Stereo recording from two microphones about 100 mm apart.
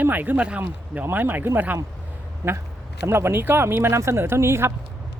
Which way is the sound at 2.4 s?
30° right (ahead or behind).